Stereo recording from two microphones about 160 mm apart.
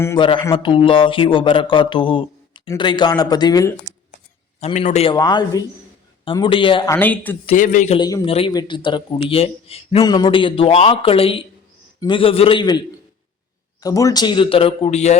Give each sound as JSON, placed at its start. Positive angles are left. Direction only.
{"t": 0.2, "sound": "speech", "side_deg": 30}
{"t": 4.6, "sound": "speech", "side_deg": 45}
{"t": 5.1, "sound": "speech", "side_deg": 25}
{"t": 6.9, "sound": "speech", "side_deg": 10}
{"t": 7.5, "sound": "a man's voice", "side_deg": 55}
{"t": 7.9, "sound": "speech", "side_deg": 30}
{"t": 10.1, "sound": "speech", "side_deg": 25}
{"t": 13.8, "sound": "speech", "side_deg": 20}